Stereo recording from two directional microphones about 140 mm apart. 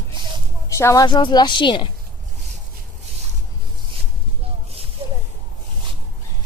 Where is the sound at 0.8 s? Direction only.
20° left (ahead or behind).